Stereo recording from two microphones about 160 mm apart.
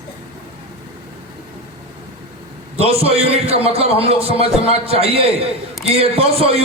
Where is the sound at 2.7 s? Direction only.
40° right (ahead or behind).